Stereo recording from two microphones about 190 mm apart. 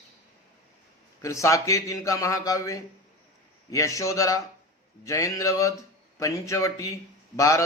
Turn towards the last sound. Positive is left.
turn(degrees=15)  # may be behind; listen again after turning